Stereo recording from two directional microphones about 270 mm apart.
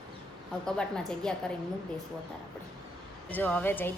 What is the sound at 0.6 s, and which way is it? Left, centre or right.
Speech, centre.